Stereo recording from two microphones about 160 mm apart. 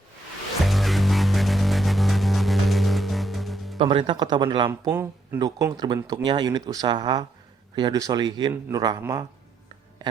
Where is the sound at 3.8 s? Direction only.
30° right (ahead or behind).